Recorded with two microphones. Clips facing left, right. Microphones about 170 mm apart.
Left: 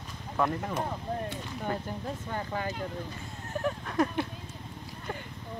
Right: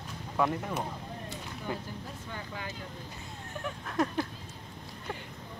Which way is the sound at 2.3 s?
45° left (ahead or behind).